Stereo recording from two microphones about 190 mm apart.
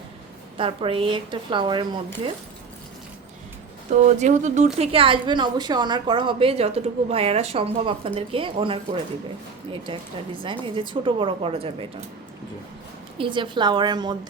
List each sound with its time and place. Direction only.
0.5 s speech: 30° right (ahead or behind)
4.0 s speech: 40° right (ahead or behind)
13.1 s speech: 25° right (ahead or behind)